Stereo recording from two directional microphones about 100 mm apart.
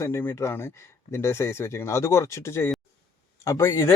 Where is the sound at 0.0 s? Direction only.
25° left (ahead or behind).